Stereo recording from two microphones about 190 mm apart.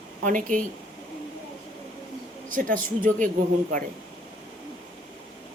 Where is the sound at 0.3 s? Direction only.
40° right (ahead or behind).